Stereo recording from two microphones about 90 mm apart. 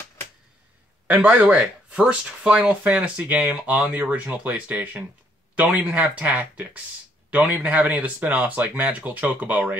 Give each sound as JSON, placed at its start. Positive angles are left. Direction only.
{"t": 1.4, "sound": "speech", "side_deg": -15}